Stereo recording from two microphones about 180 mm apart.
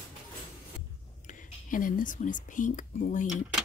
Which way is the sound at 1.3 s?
45° left (ahead or behind).